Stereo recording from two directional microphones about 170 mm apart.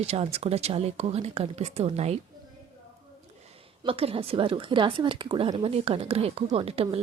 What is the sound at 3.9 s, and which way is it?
Speech, 35° right (ahead or behind).